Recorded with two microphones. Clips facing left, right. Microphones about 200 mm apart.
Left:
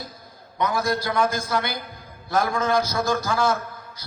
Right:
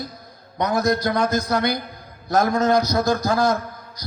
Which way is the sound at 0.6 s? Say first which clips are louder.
Right 4 dB; 40° right (ahead or behind).